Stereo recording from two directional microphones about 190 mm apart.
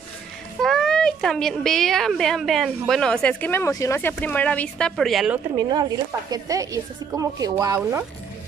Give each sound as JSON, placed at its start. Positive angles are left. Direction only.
{"t": 0.6, "sound": "a woman's voice", "side_deg": 0}
{"t": 5.6, "sound": "speech", "side_deg": -20}